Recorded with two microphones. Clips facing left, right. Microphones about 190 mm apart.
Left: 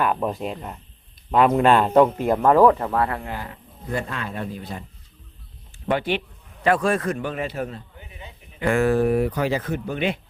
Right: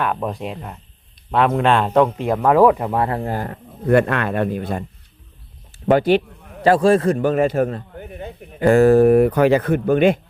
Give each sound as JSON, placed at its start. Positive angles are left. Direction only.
{"t": 0.0, "sound": "speech", "side_deg": 0}
{"t": 3.2, "sound": "speech", "side_deg": -40}
{"t": 3.8, "sound": "speech", "side_deg": -65}
{"t": 5.9, "sound": "a man's voice", "side_deg": -40}
{"t": 7.2, "sound": "a man's voice", "side_deg": -45}
{"t": 8.6, "sound": "speech", "side_deg": -40}